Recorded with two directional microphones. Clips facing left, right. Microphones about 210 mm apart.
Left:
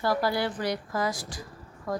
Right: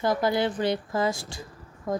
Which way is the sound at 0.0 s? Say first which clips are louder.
Right 3 dB; 20° right (ahead or behind).